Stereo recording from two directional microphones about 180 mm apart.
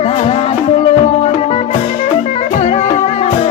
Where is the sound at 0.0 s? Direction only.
35° left (ahead or behind).